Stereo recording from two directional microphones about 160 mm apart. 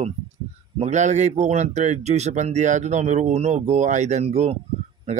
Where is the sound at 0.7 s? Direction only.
45° right (ahead or behind).